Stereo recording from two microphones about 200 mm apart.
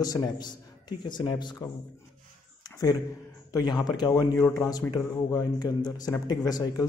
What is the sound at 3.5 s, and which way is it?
A man's voice, 20° left (ahead or behind).